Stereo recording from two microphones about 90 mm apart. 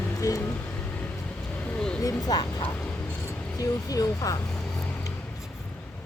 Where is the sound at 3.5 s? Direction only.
40° left (ahead or behind).